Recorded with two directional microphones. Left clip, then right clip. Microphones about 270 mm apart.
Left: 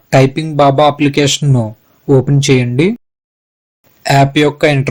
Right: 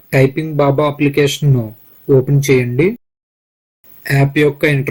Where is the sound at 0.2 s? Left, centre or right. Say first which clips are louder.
Left 3 dB; left.